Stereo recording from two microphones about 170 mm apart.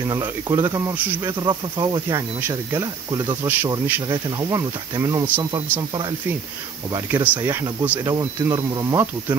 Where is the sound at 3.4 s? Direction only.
10° right (ahead or behind).